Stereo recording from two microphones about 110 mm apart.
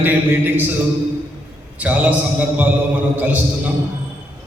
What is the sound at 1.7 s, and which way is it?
A man's voice, 15° right (ahead or behind).